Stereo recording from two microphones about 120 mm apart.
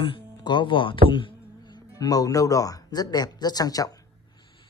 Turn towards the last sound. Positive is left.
turn(degrees=30)  # may be behind; listen again after turning